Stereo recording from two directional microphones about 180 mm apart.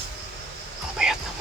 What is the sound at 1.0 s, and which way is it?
Clip-clop, 5° right (ahead or behind).